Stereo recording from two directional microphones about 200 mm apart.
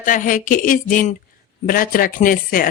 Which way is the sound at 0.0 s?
40° left (ahead or behind).